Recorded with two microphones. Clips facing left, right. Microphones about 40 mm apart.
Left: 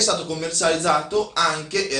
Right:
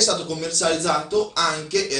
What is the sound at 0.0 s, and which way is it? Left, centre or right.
Speech, centre.